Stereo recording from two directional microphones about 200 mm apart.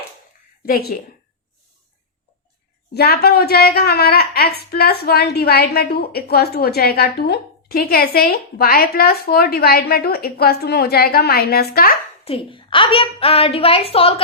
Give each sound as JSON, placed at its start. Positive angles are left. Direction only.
{"t": 0.6, "sound": "a woman's voice", "side_deg": 50}
{"t": 2.9, "sound": "a woman's voice", "side_deg": 50}
{"t": 12.2, "sound": "a woman's voice", "side_deg": 25}